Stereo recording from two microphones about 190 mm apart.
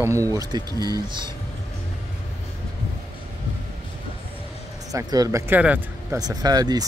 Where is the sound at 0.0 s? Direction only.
15° right (ahead or behind).